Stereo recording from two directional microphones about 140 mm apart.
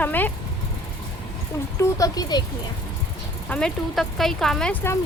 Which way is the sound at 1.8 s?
25° left (ahead or behind).